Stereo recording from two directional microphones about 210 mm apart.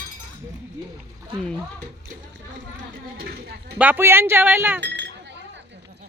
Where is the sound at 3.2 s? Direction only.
50° right (ahead or behind).